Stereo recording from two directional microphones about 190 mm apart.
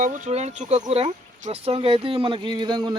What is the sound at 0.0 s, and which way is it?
Speech, 40° right (ahead or behind).